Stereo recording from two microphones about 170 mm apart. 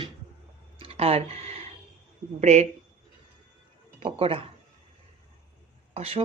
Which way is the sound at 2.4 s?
40° right (ahead or behind).